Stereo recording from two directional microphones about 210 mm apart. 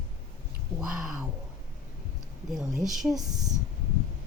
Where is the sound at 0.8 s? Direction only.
Centre (ahead or behind).